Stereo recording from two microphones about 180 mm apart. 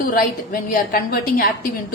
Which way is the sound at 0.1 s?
50° left (ahead or behind).